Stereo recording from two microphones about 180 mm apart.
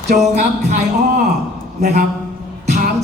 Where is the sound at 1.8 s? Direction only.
40° right (ahead or behind).